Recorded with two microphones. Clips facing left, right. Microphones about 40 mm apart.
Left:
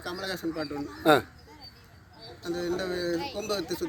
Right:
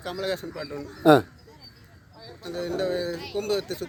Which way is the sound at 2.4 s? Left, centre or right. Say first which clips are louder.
Right 2 dB; centre.